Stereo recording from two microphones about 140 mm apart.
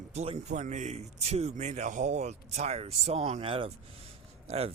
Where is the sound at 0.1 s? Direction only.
50° right (ahead or behind).